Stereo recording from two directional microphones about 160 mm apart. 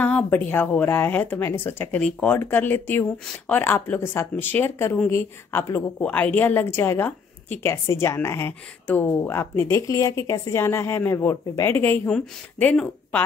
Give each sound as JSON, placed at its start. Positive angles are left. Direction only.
{"t": 0.0, "sound": "a woman's voice", "side_deg": 10}